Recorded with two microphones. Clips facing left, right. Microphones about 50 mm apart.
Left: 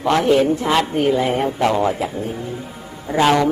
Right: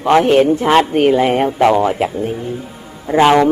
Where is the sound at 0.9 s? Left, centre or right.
Right.